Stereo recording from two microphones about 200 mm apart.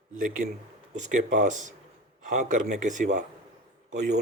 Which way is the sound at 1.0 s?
40° right (ahead or behind).